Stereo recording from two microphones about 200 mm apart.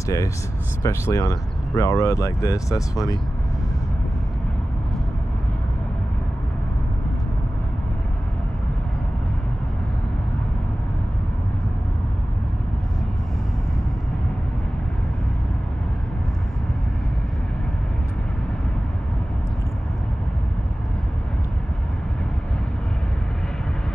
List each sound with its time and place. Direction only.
0.8 s speech: 15° left (ahead or behind)